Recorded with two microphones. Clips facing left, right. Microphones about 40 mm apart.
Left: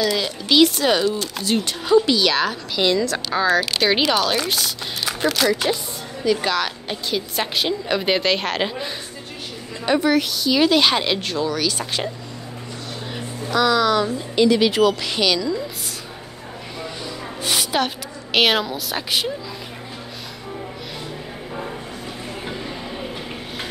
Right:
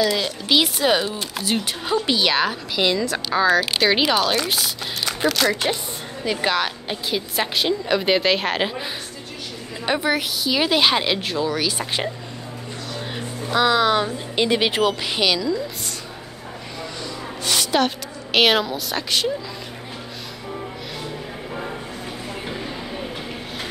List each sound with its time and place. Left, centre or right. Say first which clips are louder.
0.0 s speech: even; centre
2.0 s a woman's voice: left 1 dB; centre
5.5 s a woman's voice: left 2 dB; centre
6.9 s a woman's voice: even; centre
9.8 s speech: left 3 dB; centre
13.1 s speech: even; right
15.0 s speech: even; centre
17.4 s a woman's voice: right 1 dB; centre
22.5 s a sound: even; centre